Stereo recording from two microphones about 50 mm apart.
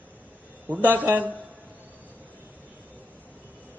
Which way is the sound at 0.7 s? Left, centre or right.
Right.